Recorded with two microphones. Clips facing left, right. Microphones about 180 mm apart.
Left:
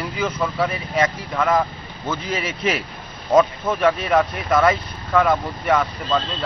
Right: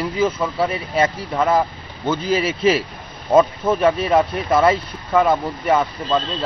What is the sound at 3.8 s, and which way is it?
Speech, 30° right (ahead or behind).